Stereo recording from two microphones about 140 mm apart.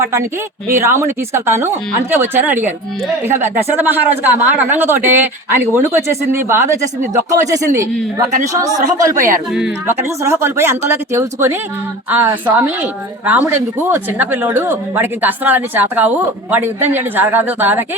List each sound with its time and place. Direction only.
0.7 s a woman's voice: 20° right (ahead or behind)
9.1 s speech: 75° right (ahead or behind)
9.5 s speech: 5° right (ahead or behind)
9.8 s a woman's voice: 15° right (ahead or behind)